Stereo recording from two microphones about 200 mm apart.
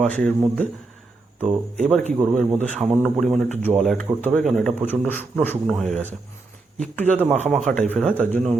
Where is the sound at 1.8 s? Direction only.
Centre (ahead or behind).